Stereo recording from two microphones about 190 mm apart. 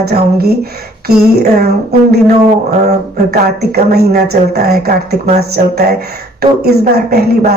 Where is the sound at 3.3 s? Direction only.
55° right (ahead or behind).